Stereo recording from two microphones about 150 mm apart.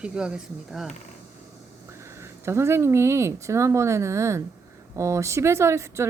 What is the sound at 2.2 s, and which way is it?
A woman's voice, 15° right (ahead or behind).